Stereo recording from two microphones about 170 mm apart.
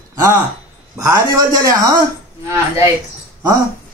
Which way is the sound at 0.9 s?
20° right (ahead or behind).